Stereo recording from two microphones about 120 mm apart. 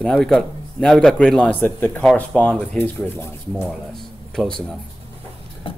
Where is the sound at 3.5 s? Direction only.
10° right (ahead or behind).